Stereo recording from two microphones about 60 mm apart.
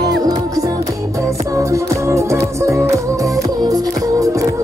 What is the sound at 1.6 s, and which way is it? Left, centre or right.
Music, right.